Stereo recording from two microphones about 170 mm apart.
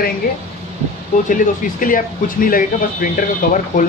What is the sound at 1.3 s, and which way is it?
Speech, 50° left (ahead or behind).